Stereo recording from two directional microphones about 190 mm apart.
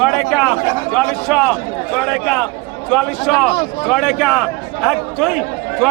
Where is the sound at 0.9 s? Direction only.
5° left (ahead or behind).